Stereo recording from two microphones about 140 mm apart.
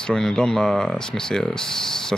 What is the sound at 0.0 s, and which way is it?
Speech, 5° left (ahead or behind).